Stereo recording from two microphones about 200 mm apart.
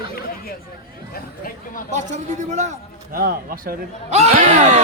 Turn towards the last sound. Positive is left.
turn(degrees=-35)  # may be behind; listen again after turning